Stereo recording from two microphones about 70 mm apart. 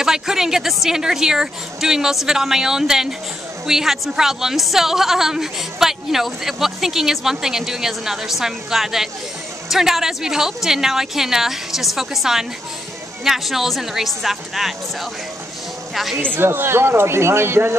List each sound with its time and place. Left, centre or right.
0.0 s a woman's voice: centre
16.3 s speech: right